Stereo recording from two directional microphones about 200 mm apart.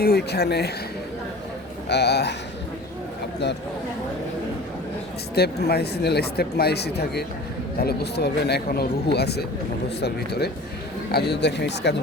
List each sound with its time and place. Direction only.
0.0 s speech: 55° left (ahead or behind)
1.9 s speech: 55° left (ahead or behind)
5.3 s speech: 55° left (ahead or behind)